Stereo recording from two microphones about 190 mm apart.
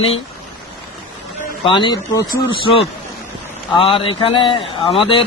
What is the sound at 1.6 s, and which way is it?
A man's voice, 25° left (ahead or behind).